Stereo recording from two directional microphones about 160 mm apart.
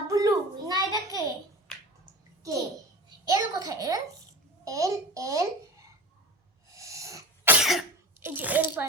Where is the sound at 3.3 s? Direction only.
25° right (ahead or behind).